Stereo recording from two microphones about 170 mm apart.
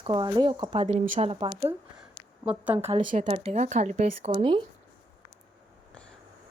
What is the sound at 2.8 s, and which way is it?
Speech, 35° right (ahead or behind).